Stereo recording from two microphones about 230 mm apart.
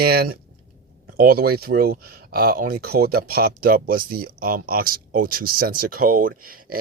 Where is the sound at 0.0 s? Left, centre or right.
Right.